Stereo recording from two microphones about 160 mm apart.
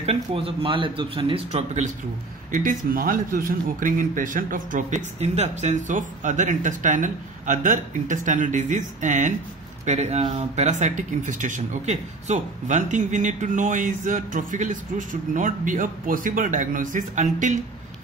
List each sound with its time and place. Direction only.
0.0 s speech: 40° right (ahead or behind)
2.5 s speech: 60° right (ahead or behind)